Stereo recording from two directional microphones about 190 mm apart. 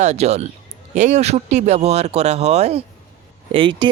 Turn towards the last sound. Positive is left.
turn(degrees=-25)  # may be behind; listen again after turning